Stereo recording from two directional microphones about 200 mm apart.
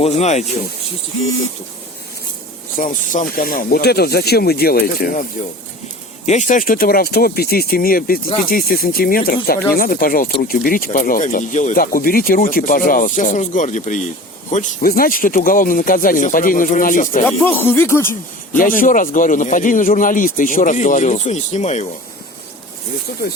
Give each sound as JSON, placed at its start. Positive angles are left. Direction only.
{"t": 0.0, "sound": "a man's voice", "side_deg": 35}
{"t": 2.7, "sound": "speech", "side_deg": 40}
{"t": 6.2, "sound": "speech", "side_deg": 40}
{"t": 17.2, "sound": "speech", "side_deg": 10}
{"t": 18.5, "sound": "a man's voice", "side_deg": 45}